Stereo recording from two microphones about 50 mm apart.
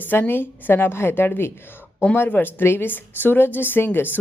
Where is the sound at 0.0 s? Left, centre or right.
Left.